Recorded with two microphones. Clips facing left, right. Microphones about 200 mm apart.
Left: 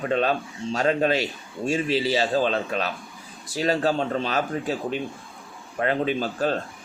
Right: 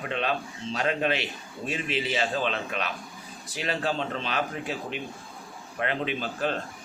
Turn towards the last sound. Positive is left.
turn(degrees=40)  # may be behind; listen again after turning